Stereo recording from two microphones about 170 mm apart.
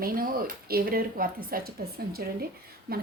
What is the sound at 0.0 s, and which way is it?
A woman's voice, 60° right (ahead or behind).